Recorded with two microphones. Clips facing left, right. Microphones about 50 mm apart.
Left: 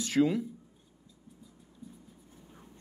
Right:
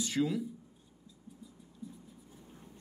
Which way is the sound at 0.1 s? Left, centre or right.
Left.